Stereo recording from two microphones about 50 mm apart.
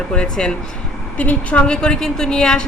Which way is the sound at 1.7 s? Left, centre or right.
Centre.